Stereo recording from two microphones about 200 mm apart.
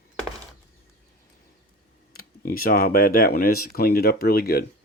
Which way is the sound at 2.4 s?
45° left (ahead or behind).